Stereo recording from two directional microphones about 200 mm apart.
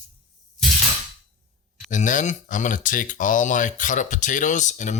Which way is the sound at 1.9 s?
40° left (ahead or behind).